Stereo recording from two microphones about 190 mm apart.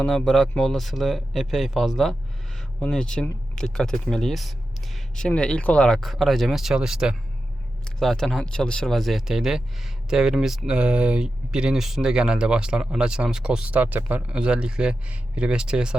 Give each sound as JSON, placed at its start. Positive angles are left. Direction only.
{"t": 0.0, "sound": "speech", "side_deg": 5}